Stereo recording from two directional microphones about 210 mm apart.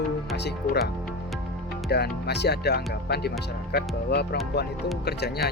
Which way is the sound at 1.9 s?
50° left (ahead or behind).